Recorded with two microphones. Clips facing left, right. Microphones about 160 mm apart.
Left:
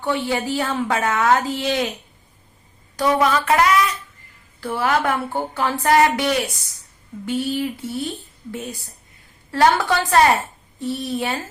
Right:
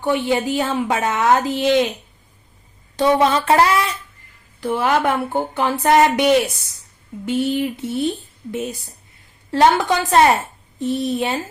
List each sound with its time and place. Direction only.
0.0 s speech: 20° right (ahead or behind)
2.9 s a sound: 25° right (ahead or behind)
4.6 s speech: 20° right (ahead or behind)
9.5 s a woman's voice: 20° right (ahead or behind)